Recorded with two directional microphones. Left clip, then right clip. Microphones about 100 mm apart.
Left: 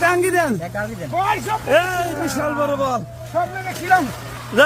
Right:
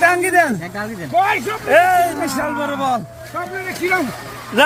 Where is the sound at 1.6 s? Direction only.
35° left (ahead or behind).